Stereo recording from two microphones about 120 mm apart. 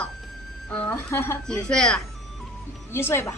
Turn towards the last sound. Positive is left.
turn(degrees=20)  # may be behind; listen again after turning